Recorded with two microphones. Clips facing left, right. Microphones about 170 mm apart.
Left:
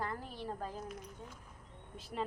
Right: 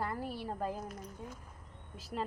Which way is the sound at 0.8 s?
40° right (ahead or behind).